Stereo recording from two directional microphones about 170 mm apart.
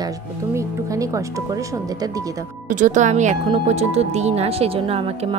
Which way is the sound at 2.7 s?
45° right (ahead or behind).